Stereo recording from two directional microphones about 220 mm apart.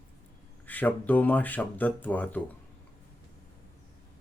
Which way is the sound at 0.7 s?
5° left (ahead or behind).